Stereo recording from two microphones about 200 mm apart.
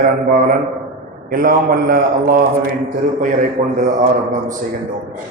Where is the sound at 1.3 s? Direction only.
45° right (ahead or behind).